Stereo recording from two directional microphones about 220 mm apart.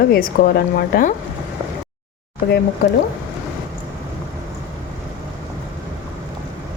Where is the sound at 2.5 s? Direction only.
45° left (ahead or behind).